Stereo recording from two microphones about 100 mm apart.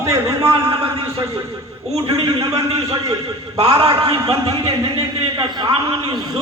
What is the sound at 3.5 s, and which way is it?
Speech, 85° right.